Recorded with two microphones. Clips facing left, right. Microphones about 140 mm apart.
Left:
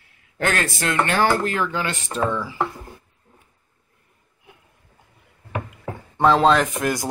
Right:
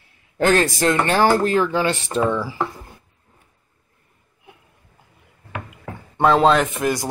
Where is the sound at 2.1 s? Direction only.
15° right (ahead or behind).